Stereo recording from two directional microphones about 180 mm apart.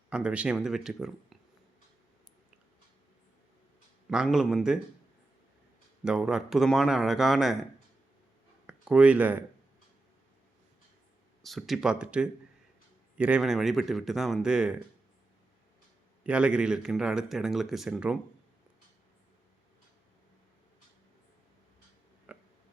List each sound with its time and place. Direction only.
0.1 s speech: 5° right (ahead or behind)
4.1 s speech: 5° right (ahead or behind)
6.1 s speech: 5° right (ahead or behind)
8.6 s speech: 5° right (ahead or behind)
11.4 s speech: centre (ahead or behind)
16.2 s speech: 5° right (ahead or behind)
22.3 s a sound: 10° right (ahead or behind)